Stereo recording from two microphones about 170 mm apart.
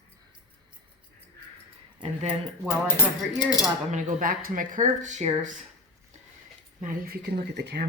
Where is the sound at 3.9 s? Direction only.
55° right (ahead or behind).